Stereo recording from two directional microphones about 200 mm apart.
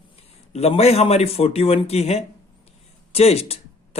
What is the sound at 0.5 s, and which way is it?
A man's voice, 30° left (ahead or behind).